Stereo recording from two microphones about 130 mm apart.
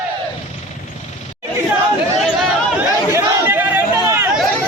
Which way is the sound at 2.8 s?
15° right (ahead or behind).